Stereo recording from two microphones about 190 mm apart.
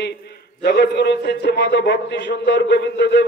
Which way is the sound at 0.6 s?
60° left (ahead or behind).